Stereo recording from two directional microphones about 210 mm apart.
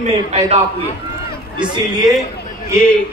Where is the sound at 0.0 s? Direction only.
30° right (ahead or behind).